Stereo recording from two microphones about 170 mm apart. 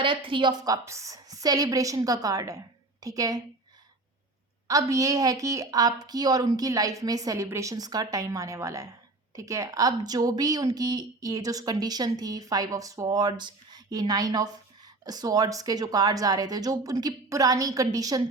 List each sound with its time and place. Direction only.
0.0 s speech: 30° right (ahead or behind)
4.7 s speech: 20° right (ahead or behind)